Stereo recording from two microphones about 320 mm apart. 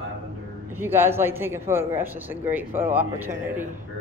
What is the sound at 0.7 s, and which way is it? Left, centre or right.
Speech, centre.